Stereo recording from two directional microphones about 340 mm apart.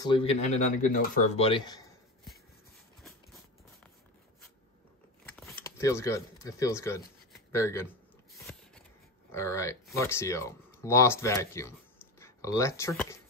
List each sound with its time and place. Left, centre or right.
0.0 s speech: centre
5.2 s a sound: centre
9.3 s speech: centre